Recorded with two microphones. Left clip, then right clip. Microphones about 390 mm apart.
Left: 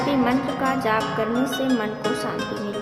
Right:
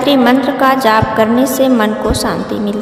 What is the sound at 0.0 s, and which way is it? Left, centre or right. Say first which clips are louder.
Speech: right 11 dB; right.